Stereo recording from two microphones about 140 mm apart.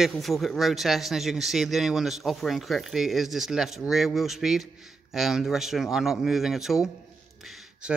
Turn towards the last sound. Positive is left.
turn(degrees=-5)  # may be behind; listen again after turning